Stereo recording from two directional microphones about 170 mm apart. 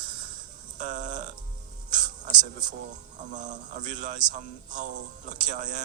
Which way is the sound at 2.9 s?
45° right (ahead or behind).